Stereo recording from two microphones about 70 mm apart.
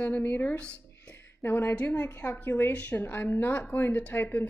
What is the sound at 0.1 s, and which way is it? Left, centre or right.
Speech, left.